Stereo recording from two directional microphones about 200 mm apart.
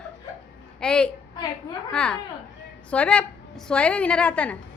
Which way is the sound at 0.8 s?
5° left (ahead or behind).